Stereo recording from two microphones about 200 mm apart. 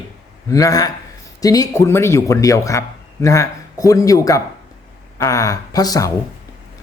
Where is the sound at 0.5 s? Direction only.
15° left (ahead or behind).